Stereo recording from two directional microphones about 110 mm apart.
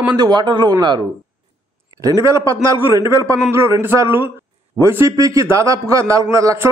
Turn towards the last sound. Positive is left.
turn(degrees=-25)  # may be behind; listen again after turning